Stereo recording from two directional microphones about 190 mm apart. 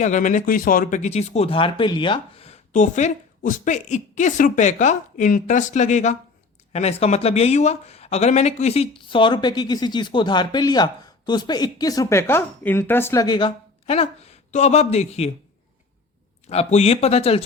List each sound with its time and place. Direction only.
0.0 s speech: 40° left (ahead or behind)
16.5 s speech: 35° left (ahead or behind)